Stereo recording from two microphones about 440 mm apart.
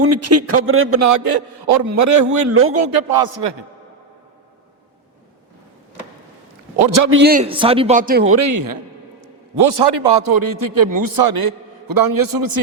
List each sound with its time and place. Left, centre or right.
0.0 s a man's voice: right
1.9 s a man's voice: right
2.6 s a man's voice: right
2.9 s a man's voice: right
6.8 s a man's voice: right
7.1 s a man's voice: right
9.2 s a man's voice: right